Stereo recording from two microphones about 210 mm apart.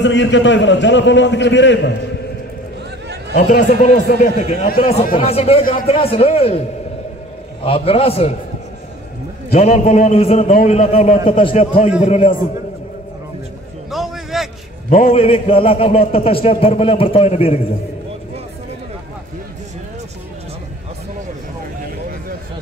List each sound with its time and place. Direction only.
0.0 s a man's voice: 60° left (ahead or behind)
3.3 s a man's voice: 40° left (ahead or behind)
7.6 s a man's voice: 25° left (ahead or behind)
9.5 s a man's voice: 35° left (ahead or behind)
10.5 s a man's voice: 40° left (ahead or behind)
10.8 s a man's voice: 30° left (ahead or behind)
13.8 s a sound: centre (ahead or behind)
14.9 s a man's voice: 30° left (ahead or behind)